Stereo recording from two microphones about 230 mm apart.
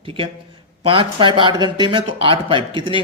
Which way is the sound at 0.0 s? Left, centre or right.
Right.